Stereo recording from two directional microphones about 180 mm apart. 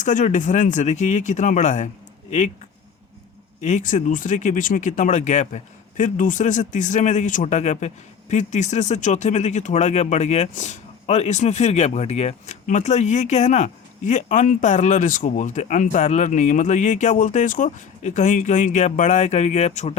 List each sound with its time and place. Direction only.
0.0 s speech: 45° left (ahead or behind)
3.6 s speech: 40° left (ahead or behind)